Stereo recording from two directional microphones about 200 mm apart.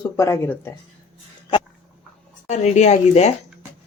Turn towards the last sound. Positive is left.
turn(degrees=35)  # may be behind; listen again after turning